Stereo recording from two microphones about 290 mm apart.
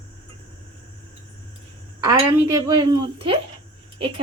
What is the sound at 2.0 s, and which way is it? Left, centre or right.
A woman's voice, centre.